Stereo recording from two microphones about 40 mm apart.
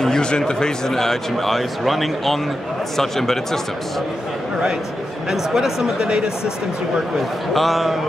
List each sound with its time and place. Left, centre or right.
0.0 s a sound: centre
0.4 s a man's voice: centre
5.3 s speech: centre
7.5 s a man's voice: centre